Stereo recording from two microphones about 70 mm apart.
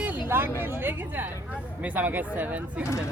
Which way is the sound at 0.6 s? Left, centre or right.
Right.